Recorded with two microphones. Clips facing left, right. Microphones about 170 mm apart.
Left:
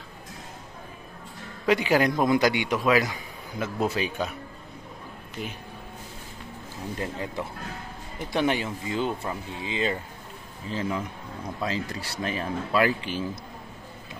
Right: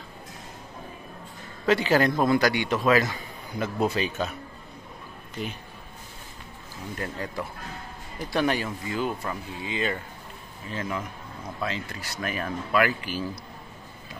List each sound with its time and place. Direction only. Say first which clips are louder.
1.7 s a man's voice: even; 15° left (ahead or behind)
7.0 s speech: even; 20° left (ahead or behind)